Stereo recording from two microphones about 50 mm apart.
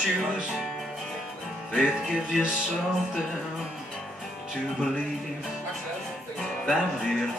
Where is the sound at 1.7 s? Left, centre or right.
Centre.